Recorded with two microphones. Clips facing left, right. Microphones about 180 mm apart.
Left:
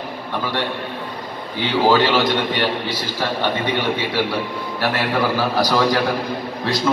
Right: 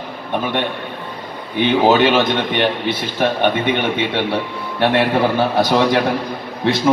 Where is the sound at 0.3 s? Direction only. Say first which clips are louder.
Right 4 dB; 20° right (ahead or behind).